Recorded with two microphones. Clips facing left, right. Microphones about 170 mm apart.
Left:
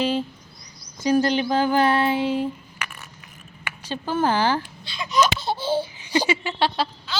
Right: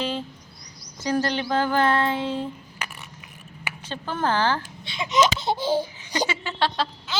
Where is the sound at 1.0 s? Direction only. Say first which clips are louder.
Left 5 dB; 15° left (ahead or behind).